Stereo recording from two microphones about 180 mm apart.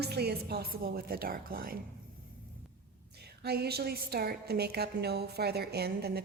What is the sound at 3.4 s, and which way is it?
A woman's voice, 65° right (ahead or behind).